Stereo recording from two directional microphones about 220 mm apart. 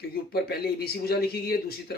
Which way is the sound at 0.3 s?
45° left (ahead or behind).